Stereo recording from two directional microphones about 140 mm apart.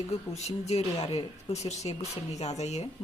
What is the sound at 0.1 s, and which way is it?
A woman's voice, 50° left (ahead or behind).